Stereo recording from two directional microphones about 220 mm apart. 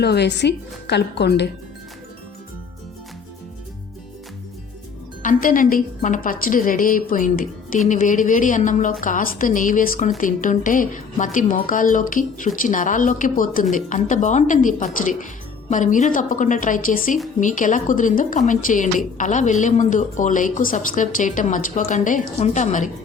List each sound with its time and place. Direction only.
0.0 s a woman's voice: 50° left (ahead or behind)
5.2 s a woman's voice: 40° left (ahead or behind)